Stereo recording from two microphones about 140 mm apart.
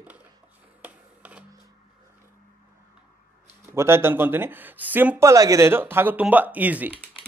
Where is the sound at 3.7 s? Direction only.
20° right (ahead or behind).